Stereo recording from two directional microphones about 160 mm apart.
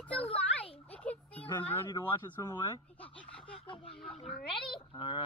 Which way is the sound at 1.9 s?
25° left (ahead or behind).